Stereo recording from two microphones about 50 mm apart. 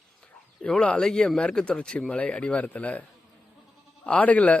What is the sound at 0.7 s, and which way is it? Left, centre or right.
A man's voice, centre.